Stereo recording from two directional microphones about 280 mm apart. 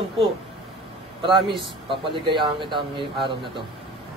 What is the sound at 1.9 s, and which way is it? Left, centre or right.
A man's voice, centre.